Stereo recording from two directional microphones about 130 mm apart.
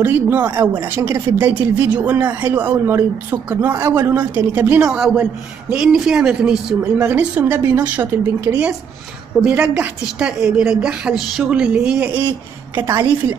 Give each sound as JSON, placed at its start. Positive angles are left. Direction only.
{"t": 0.0, "sound": "speech", "side_deg": -15}
{"t": 3.7, "sound": "a woman's voice", "side_deg": -30}
{"t": 4.2, "sound": "speech", "side_deg": -15}
{"t": 9.4, "sound": "speech", "side_deg": -10}
{"t": 12.7, "sound": "a woman's voice", "side_deg": -20}